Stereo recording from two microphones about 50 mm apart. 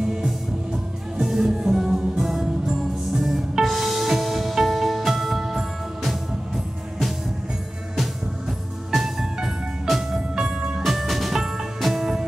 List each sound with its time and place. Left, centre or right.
0.0 s music: centre
8.9 s music: centre
10.8 s music: centre